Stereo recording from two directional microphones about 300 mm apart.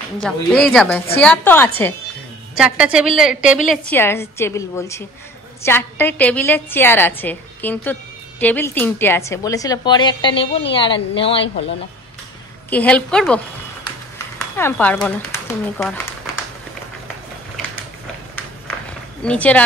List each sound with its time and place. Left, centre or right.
0.2 s a woman's voice: centre
12.6 s a woman's voice: centre
19.2 s a woman's voice: centre